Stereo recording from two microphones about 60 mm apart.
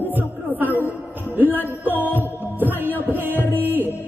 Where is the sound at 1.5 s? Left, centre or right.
Right.